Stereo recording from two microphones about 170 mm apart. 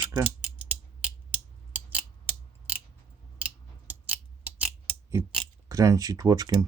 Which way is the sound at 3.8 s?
10° right (ahead or behind).